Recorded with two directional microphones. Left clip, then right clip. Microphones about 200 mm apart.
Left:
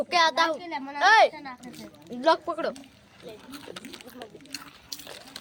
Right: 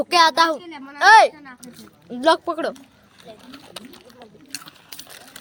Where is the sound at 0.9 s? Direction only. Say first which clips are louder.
Right 7 dB; 40° right (ahead or behind).